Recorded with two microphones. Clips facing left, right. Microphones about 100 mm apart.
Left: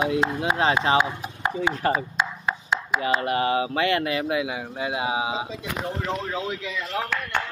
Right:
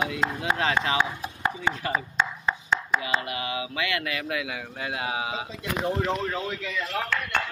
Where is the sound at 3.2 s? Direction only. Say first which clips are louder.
Left 9 dB; 40° left (ahead or behind).